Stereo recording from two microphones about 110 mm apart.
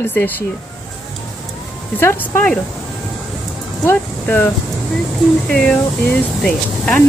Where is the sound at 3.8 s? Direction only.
20° left (ahead or behind).